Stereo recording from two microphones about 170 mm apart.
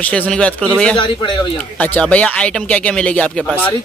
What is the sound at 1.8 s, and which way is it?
Speech, 10° left (ahead or behind).